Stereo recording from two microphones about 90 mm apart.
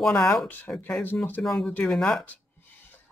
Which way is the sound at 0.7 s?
20° left (ahead or behind).